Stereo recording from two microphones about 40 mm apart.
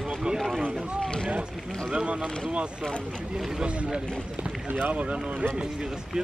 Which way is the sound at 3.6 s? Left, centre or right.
Right.